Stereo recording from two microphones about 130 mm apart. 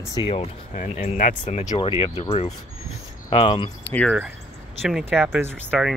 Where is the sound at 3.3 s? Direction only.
40° left (ahead or behind).